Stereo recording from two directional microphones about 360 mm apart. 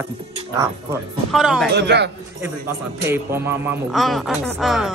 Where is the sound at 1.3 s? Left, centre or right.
Centre.